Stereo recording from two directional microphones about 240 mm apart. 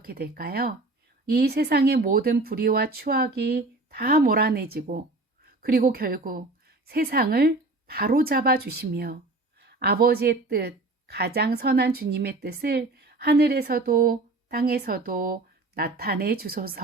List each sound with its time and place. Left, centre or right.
0.0 s speech: right